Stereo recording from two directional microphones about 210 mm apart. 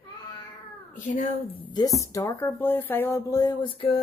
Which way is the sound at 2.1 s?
15° left (ahead or behind).